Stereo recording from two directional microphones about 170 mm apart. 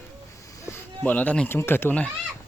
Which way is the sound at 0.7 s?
10° left (ahead or behind).